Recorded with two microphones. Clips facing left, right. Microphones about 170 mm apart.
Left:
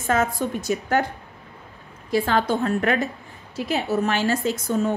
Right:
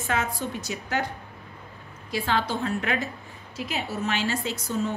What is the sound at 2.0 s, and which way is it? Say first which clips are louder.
A woman's voice: left 6 dB; 50° left (ahead or behind).